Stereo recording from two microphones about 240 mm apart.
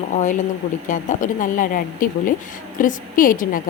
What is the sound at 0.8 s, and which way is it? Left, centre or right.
Speech, left.